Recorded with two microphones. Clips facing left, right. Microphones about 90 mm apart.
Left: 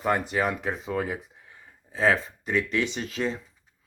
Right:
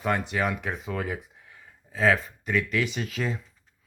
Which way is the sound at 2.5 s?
30° left (ahead or behind).